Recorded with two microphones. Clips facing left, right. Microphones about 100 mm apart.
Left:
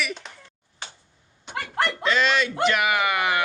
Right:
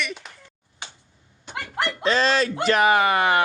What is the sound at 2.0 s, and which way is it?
Speech, 35° right (ahead or behind).